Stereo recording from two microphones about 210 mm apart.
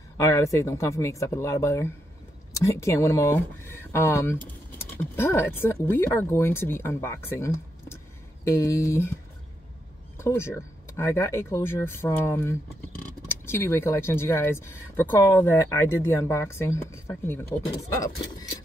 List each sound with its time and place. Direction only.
0.2 s speech: 15° left (ahead or behind)
10.1 s speech: 10° left (ahead or behind)